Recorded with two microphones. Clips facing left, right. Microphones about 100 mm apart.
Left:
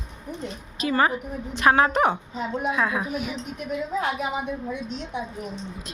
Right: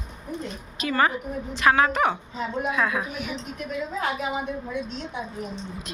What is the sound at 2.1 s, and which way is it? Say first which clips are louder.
A woman's voice: left 1 dB; 20° left (ahead or behind).